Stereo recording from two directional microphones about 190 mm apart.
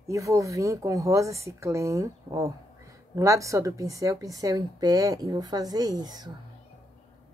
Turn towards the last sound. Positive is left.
turn(degrees=-20)  # may be behind; listen again after turning